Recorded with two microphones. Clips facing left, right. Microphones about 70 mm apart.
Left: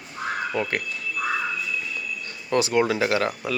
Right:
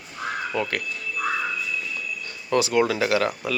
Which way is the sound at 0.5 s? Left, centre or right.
Left.